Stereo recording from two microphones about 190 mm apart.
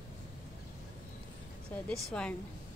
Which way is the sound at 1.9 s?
5° left (ahead or behind).